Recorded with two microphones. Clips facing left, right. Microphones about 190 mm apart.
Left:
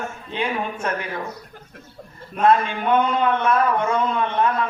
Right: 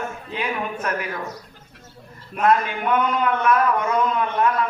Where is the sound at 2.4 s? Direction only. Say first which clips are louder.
Left 1 dB; 25° left (ahead or behind).